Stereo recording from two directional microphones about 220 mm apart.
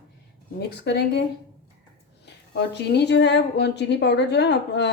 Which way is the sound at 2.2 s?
50° left (ahead or behind).